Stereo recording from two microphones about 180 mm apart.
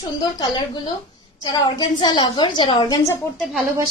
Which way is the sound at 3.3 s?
Centre (ahead or behind).